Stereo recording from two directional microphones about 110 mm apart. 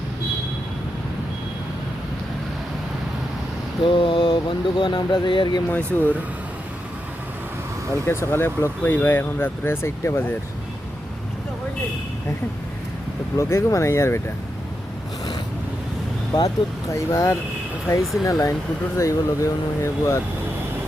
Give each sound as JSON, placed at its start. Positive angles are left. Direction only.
{"t": 3.8, "sound": "a sound", "side_deg": 50}
{"t": 5.6, "sound": "speech", "side_deg": 15}
{"t": 8.0, "sound": "speech", "side_deg": 20}
{"t": 13.3, "sound": "speech", "side_deg": 25}
{"t": 16.9, "sound": "speech", "side_deg": 25}
{"t": 18.0, "sound": "speech", "side_deg": 0}
{"t": 18.3, "sound": "speech", "side_deg": 30}